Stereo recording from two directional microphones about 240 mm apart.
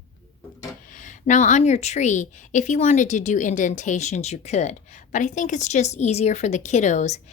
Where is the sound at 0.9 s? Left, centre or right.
Left.